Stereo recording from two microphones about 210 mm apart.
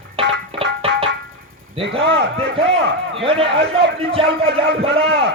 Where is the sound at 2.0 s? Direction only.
55° right (ahead or behind).